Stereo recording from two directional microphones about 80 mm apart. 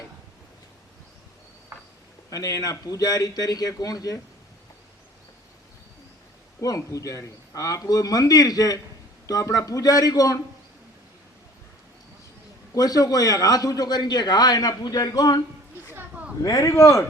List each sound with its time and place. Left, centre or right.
1.7 s a sound: right
2.3 s a man's voice: left
6.6 s a man's voice: left
12.7 s a man's voice: left
15.9 s a sound: right
16.4 s speech: left